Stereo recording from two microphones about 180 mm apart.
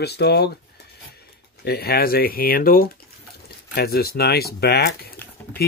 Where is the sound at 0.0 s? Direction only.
65° left (ahead or behind).